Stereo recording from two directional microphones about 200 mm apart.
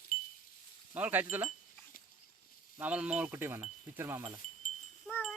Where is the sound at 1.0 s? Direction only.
10° right (ahead or behind).